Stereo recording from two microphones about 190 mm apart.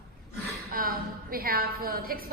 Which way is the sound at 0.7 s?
50° right (ahead or behind).